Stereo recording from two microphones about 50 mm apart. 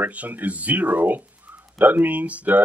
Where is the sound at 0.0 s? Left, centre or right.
Right.